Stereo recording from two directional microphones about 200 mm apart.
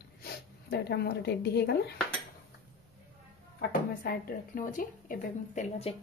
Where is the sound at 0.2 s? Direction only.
55° left (ahead or behind).